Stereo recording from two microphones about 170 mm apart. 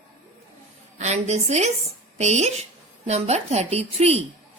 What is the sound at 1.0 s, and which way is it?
Speech, 40° right (ahead or behind).